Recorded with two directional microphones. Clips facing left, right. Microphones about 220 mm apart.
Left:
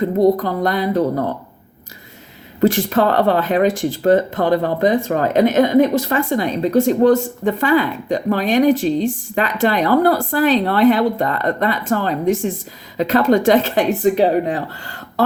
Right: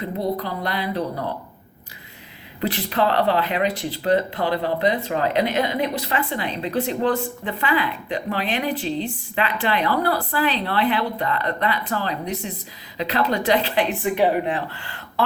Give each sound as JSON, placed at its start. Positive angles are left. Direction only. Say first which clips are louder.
{"t": 0.0, "sound": "speech", "louder": "left 11 dB", "side_deg": 45}
{"t": 2.6, "sound": "speech", "louder": "left 8 dB", "side_deg": 45}